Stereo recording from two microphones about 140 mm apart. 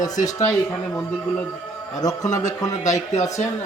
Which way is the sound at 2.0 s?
25° left (ahead or behind).